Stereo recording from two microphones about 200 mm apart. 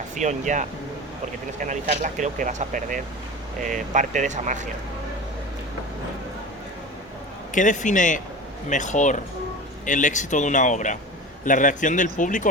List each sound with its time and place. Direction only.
0.2 s speech: 35° right (ahead or behind)
7.5 s speech: 40° left (ahead or behind)